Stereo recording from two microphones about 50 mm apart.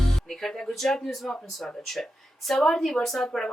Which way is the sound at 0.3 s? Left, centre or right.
Centre.